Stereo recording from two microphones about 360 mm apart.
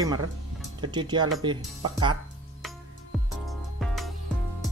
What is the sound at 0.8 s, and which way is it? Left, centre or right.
Speech, centre.